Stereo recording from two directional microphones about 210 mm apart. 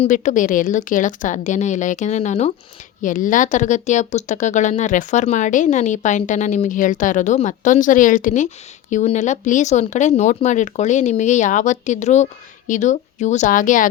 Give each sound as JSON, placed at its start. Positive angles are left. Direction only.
{"t": 0.0, "sound": "speech", "side_deg": 35}